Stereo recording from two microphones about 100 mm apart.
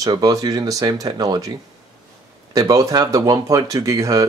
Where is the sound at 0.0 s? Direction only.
35° right (ahead or behind).